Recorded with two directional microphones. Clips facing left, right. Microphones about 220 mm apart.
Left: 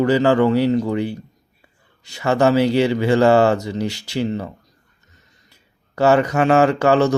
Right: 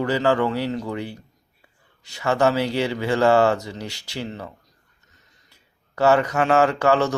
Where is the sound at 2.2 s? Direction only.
20° left (ahead or behind).